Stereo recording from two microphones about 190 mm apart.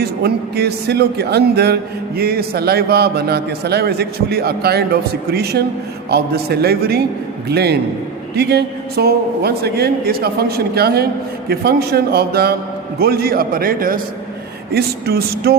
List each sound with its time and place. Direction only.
0.0 s a man's voice: 55° right (ahead or behind)